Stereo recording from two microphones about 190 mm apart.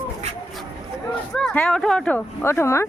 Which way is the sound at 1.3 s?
5° left (ahead or behind).